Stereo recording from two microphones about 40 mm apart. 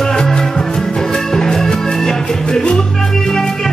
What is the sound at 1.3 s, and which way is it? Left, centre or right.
Music, centre.